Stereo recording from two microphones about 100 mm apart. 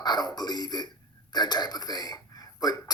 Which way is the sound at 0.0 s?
45° left (ahead or behind).